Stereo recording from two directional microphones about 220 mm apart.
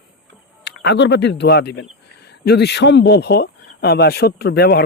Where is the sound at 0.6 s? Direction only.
50° left (ahead or behind).